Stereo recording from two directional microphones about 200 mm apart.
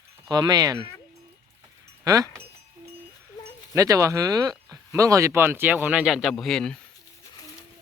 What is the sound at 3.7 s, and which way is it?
Speech, 15° right (ahead or behind).